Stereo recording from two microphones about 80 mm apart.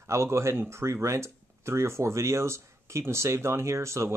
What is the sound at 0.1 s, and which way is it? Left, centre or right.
Speech, right.